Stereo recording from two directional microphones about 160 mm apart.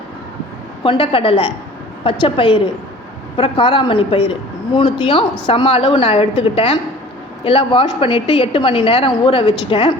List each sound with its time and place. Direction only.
0.9 s a woman's voice: 35° left (ahead or behind)